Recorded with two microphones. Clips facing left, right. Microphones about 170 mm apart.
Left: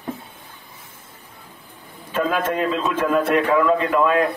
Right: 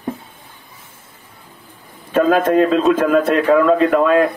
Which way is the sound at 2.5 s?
55° right (ahead or behind).